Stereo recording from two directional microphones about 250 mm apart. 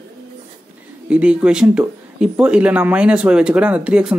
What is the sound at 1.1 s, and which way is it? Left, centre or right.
Speech, centre.